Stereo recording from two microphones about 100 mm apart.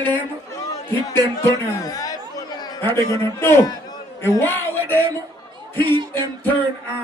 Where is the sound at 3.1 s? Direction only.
25° left (ahead or behind).